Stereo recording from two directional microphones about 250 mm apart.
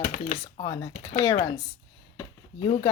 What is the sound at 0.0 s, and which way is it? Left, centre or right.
Speech, left.